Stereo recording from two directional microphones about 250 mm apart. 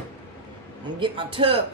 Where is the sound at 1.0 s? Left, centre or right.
Right.